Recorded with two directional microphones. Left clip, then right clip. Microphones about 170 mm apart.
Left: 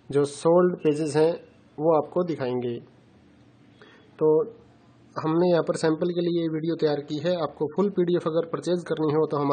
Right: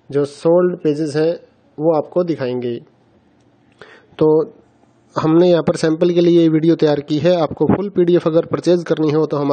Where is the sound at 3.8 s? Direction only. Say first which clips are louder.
Right 9 dB; 50° right (ahead or behind).